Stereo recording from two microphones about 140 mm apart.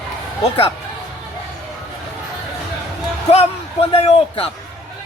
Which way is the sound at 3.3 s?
50° left (ahead or behind).